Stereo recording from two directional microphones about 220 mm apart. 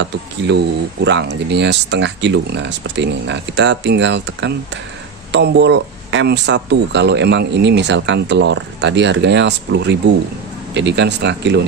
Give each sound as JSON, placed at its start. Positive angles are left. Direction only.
{"t": 1.0, "sound": "speech", "side_deg": -55}